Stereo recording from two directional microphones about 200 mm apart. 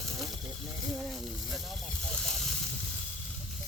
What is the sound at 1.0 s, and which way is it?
Speech, centre (ahead or behind).